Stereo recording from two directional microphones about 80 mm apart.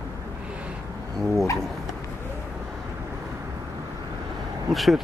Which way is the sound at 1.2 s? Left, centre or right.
Centre.